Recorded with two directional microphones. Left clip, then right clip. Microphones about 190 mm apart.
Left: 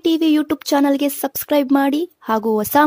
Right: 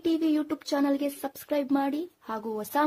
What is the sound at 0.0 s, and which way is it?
Speech, 50° left (ahead or behind).